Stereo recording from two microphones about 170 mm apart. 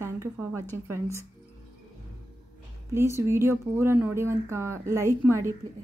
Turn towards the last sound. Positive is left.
turn(degrees=-15)  # may be behind; listen again after turning